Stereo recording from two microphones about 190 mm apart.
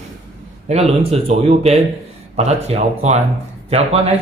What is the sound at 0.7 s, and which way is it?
Speech, 35° right (ahead or behind).